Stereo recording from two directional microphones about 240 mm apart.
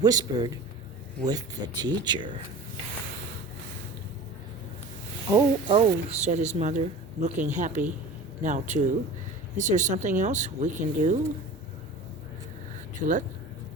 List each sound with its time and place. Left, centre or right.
0.0 s speech: centre
5.3 s speech: right
13.0 s speech: right